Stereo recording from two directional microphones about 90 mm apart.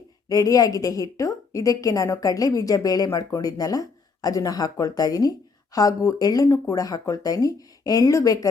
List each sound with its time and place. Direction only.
0.3 s speech: 40° left (ahead or behind)